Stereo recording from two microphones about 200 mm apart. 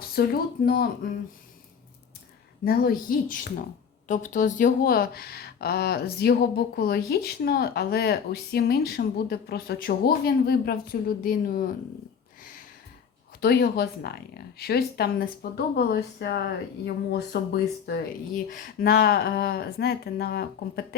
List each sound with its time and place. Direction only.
0.2 s speech: 50° left (ahead or behind)
2.6 s speech: 45° left (ahead or behind)
13.4 s speech: 55° left (ahead or behind)